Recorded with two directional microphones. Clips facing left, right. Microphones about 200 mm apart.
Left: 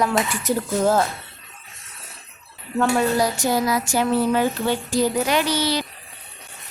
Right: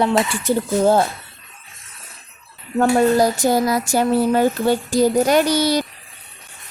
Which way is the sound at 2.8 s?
45° right (ahead or behind).